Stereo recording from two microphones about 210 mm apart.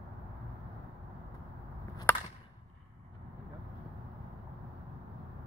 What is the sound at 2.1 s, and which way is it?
Whip, 10° left (ahead or behind).